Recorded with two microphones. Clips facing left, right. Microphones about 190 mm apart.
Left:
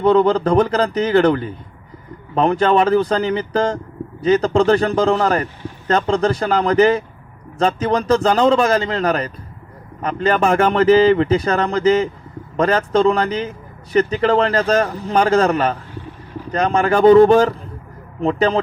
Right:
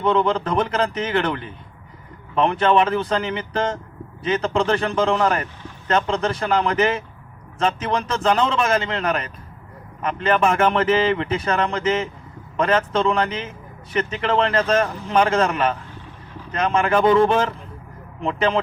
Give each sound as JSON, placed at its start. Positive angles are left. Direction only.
{"t": 0.0, "sound": "speech", "side_deg": 35}